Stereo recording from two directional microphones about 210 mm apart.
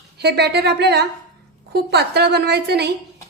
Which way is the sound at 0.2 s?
50° right (ahead or behind).